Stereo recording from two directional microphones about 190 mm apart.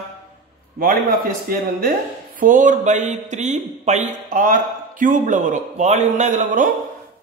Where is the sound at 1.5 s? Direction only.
50° right (ahead or behind).